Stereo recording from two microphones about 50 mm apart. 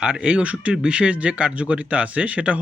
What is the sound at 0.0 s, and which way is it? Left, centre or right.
Speech, right.